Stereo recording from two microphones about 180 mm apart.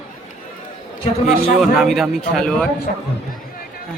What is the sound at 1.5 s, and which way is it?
A man's voice, centre (ahead or behind).